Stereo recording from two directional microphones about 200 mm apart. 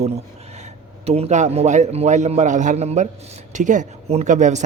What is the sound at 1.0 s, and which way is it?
Speech, 30° right (ahead or behind).